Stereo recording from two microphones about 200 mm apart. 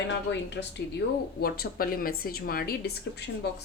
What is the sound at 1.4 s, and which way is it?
A woman's voice, 50° left (ahead or behind).